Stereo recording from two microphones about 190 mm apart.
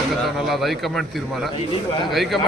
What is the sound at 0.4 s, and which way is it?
Speech, centre (ahead or behind).